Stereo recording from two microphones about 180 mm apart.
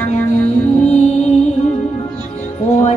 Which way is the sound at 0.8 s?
40° left (ahead or behind).